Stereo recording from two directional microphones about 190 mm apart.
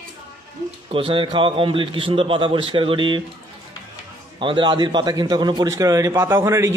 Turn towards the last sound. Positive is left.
turn(degrees=-15)  # may be behind; listen again after turning